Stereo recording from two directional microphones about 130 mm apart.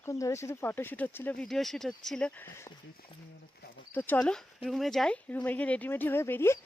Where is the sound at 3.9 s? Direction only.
15° left (ahead or behind).